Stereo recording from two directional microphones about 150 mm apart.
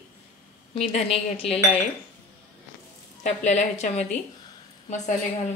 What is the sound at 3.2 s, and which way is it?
Speech, 50° left (ahead or behind).